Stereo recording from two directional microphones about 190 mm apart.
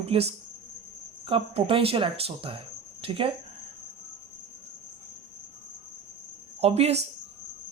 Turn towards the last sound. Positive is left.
turn(degrees=-35)  # may be behind; listen again after turning